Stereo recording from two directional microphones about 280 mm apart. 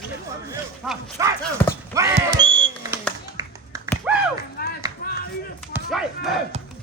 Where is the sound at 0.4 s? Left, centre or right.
Centre.